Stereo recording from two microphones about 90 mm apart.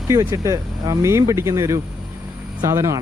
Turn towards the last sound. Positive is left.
turn(degrees=-35)  # may be behind; listen again after turning